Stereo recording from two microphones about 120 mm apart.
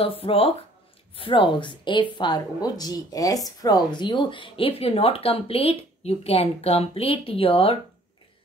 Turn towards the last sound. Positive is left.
turn(degrees=50)  # may be behind; listen again after turning